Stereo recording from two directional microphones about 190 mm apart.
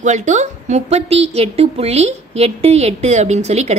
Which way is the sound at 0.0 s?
40° right (ahead or behind).